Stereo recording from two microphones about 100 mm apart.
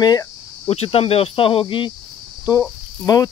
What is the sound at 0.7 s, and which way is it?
Speech, 80° left.